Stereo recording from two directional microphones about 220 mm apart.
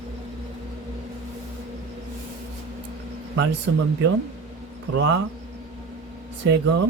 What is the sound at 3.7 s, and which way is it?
Speech, 55° right (ahead or behind).